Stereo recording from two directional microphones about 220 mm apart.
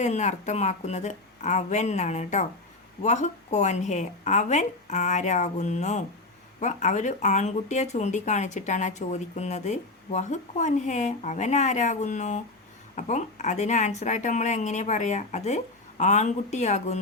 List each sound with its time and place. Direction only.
0.0 s speech: 30° left (ahead or behind)